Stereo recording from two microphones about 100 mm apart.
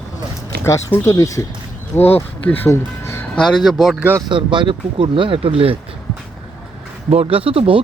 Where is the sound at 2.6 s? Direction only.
25° left (ahead or behind).